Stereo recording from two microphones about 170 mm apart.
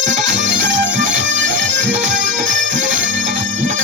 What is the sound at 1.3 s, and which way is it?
Bagpipes, 90° right.